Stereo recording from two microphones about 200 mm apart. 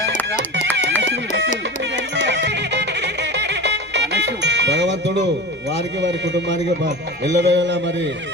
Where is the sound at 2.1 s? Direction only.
60° right (ahead or behind).